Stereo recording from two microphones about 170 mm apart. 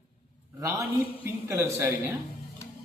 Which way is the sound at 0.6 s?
15° right (ahead or behind).